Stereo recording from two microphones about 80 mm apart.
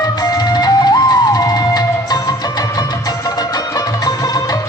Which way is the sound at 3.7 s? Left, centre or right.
Left.